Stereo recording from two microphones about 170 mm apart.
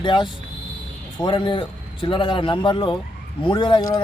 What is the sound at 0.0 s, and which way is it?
A man's voice, 25° left (ahead or behind).